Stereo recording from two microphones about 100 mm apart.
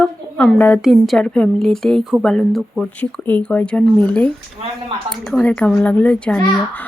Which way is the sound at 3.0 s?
15° left (ahead or behind).